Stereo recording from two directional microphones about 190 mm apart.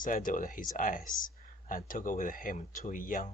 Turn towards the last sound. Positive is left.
turn(degrees=45)  # may be behind; listen again after turning